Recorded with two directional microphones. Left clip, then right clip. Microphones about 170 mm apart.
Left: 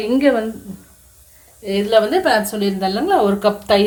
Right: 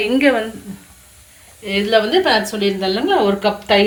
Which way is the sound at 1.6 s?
45° left (ahead or behind).